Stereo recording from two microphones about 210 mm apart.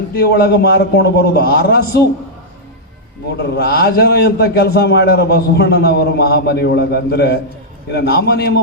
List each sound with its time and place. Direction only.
0.1 s a man's voice: 50° left (ahead or behind)
3.4 s a man's voice: 50° left (ahead or behind)